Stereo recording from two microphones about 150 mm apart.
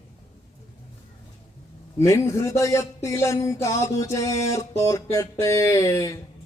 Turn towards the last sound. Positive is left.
turn(degrees=20)  # may be behind; listen again after turning